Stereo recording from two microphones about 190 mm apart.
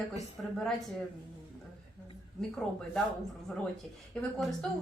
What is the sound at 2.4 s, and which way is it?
Speech, centre (ahead or behind).